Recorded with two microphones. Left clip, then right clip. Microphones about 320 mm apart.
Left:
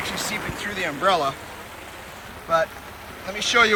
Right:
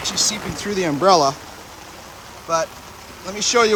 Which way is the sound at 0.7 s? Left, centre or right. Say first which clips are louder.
Right 6 dB; right.